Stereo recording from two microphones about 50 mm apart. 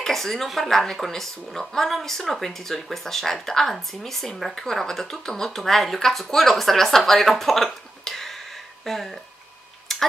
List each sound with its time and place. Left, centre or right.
0.0 s speech: centre
9.9 s tick-tock: centre